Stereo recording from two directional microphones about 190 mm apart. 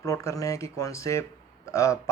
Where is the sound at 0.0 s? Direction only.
15° left (ahead or behind).